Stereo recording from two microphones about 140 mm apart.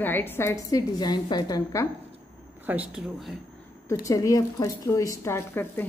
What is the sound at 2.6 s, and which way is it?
Speech, 10° right (ahead or behind).